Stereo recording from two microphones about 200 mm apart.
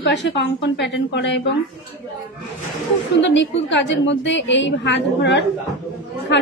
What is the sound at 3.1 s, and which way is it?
A woman's voice, 65° left (ahead or behind).